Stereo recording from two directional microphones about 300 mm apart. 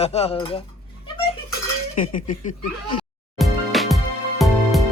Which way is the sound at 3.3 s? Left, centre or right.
Centre.